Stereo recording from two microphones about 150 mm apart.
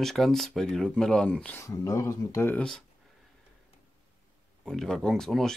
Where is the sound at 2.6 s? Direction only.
5° left (ahead or behind).